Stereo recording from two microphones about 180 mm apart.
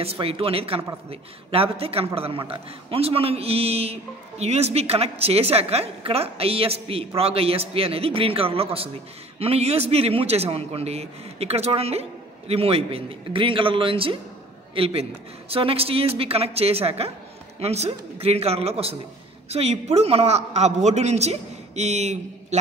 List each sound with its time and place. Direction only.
0.0 s a man's voice: 35° right (ahead or behind)